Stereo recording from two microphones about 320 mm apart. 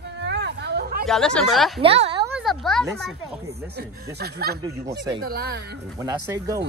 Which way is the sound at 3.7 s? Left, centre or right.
Right.